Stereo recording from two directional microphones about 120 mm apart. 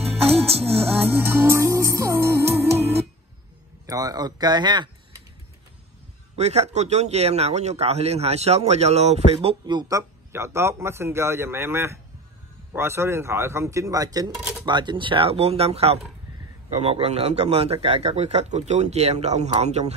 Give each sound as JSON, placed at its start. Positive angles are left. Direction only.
{"t": 0.0, "sound": "music", "side_deg": -55}
{"t": 1.1, "sound": "music", "side_deg": -20}
{"t": 3.8, "sound": "speech", "side_deg": -30}
{"t": 6.3, "sound": "speech", "side_deg": -65}
{"t": 9.7, "sound": "a man's voice", "side_deg": -35}